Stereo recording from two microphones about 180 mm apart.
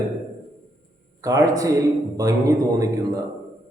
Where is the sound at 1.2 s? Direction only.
20° right (ahead or behind).